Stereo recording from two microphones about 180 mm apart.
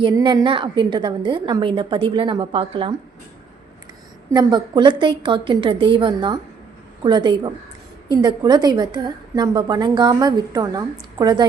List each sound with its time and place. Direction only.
0.0 s a woman's voice: 25° right (ahead or behind)
4.3 s a woman's voice: 20° right (ahead or behind)